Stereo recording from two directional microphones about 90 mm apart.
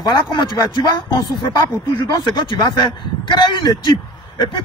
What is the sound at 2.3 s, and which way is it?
A man's voice, 60° left (ahead or behind).